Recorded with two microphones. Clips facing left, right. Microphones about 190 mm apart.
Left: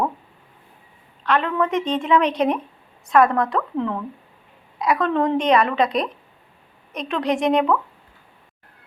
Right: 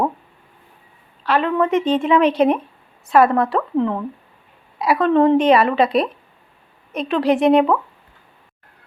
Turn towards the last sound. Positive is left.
turn(degrees=-5)  # may be behind; listen again after turning